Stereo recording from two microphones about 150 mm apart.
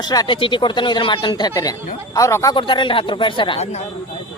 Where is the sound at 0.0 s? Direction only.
25° left (ahead or behind).